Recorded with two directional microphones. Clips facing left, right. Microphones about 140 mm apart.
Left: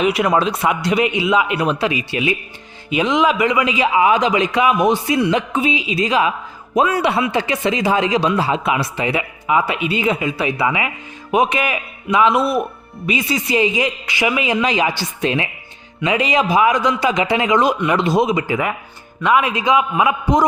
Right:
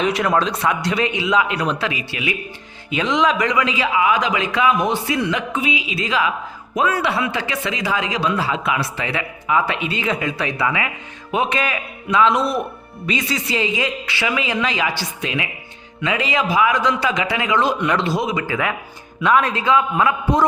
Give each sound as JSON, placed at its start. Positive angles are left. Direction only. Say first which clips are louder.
{"t": 0.0, "sound": "a man's voice", "louder": "left 2 dB", "side_deg": 10}
{"t": 2.9, "sound": "speech", "louder": "left 2 dB", "side_deg": 10}
{"t": 3.9, "sound": "a man's voice", "louder": "left 4 dB", "side_deg": 30}
{"t": 15.2, "sound": "speech", "louder": "left 7 dB", "side_deg": 35}
{"t": 16.0, "sound": "speech", "louder": "left 4 dB", "side_deg": 20}
{"t": 17.7, "sound": "speech", "louder": "left 2 dB", "side_deg": 5}
{"t": 18.0, "sound": "a man's voice", "louder": "left 5 dB", "side_deg": 20}